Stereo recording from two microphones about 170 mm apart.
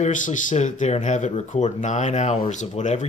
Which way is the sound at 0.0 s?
50° left (ahead or behind).